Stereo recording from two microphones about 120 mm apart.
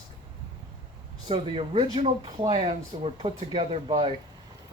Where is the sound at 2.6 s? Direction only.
50° right (ahead or behind).